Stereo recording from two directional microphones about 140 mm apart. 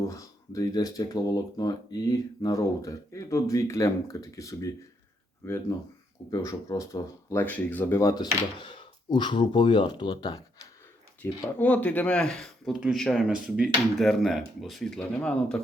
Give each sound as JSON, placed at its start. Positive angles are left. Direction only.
{"t": 0.1, "sound": "speech", "side_deg": 25}
{"t": 11.2, "sound": "speech", "side_deg": 10}